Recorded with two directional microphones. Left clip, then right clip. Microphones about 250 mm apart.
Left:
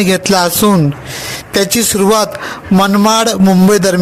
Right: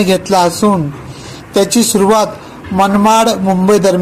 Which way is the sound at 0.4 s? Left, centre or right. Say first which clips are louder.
Even; left.